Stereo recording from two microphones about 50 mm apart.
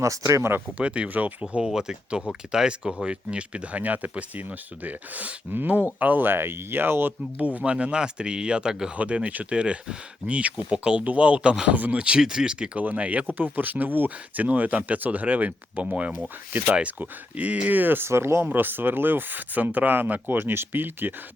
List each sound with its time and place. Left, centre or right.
0.0 s speech: right
0.8 s speech: right
1.6 s speech: centre; by 7.1 s right
7.6 s speech: right
9.0 s speech: right
12.8 s speech: right
18.1 s speech: right
18.4 s speech: right